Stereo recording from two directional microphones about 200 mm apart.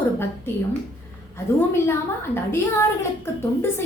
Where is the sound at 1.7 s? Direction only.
10° left (ahead or behind).